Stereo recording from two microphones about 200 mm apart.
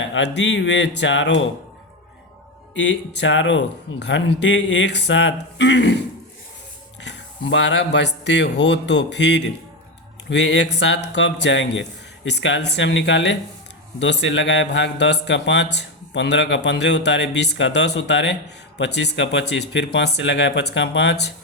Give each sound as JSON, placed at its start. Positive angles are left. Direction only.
{"t": 0.1, "sound": "speech", "side_deg": 65}
{"t": 2.7, "sound": "speech", "side_deg": 60}
{"t": 7.0, "sound": "speech", "side_deg": 65}